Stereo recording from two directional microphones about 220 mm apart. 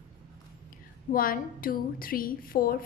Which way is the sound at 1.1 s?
40° left (ahead or behind).